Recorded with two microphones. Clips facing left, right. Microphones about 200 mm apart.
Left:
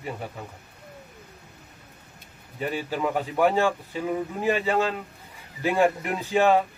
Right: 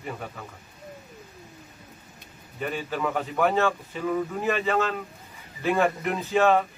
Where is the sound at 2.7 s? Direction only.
10° left (ahead or behind).